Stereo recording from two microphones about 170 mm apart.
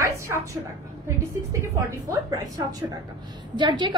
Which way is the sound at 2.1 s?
20° right (ahead or behind).